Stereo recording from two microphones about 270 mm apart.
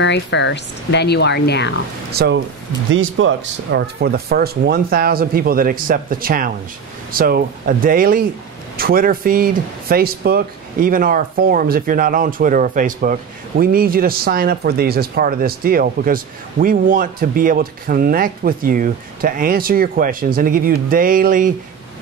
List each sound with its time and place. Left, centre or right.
0.0 s speech: left
2.1 s speech: right